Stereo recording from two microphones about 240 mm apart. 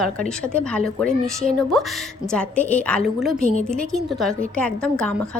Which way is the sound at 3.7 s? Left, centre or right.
Centre.